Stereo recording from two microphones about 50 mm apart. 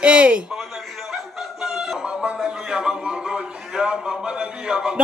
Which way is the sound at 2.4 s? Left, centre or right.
Centre.